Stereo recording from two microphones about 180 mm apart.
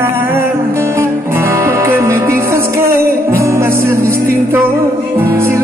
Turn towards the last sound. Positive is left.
turn(degrees=-15)  # may be behind; listen again after turning